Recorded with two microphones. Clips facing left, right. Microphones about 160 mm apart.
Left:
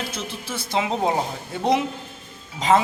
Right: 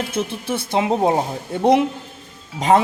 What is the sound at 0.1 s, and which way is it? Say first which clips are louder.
Speech: right 8 dB; 55° right (ahead or behind).